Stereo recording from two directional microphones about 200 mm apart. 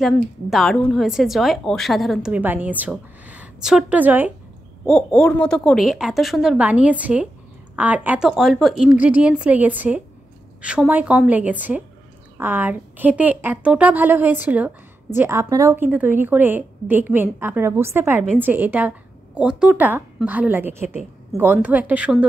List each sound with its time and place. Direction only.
0.0 s a woman's voice: centre (ahead or behind)